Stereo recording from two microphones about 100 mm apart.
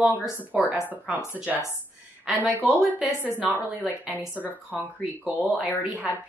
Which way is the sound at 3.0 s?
15° right (ahead or behind).